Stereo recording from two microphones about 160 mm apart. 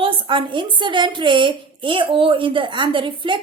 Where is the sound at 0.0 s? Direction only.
30° right (ahead or behind).